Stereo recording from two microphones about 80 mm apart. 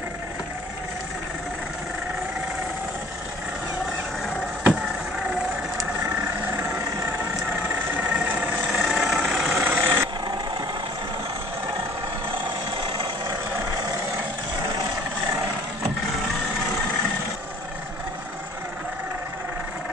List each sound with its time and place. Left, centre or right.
8.1 s vehicle: centre
8.6 s vehicle: centre
9.6 s vehicle: right